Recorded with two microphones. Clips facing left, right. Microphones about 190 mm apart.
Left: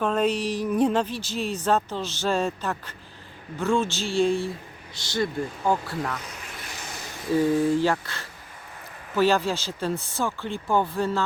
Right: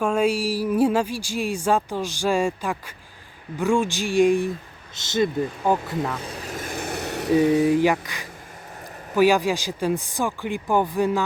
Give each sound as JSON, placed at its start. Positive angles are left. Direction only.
{"t": 0.0, "sound": "a woman's voice", "side_deg": -10}
{"t": 7.6, "sound": "a woman's voice", "side_deg": -15}